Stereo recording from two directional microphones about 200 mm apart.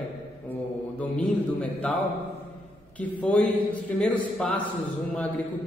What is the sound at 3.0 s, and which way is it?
Speech, 5° left (ahead or behind).